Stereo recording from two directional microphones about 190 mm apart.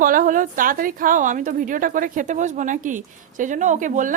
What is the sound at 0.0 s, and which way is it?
A woman's voice, 45° right (ahead or behind).